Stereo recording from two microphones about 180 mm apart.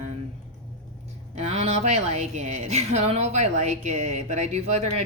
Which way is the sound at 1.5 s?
40° right (ahead or behind).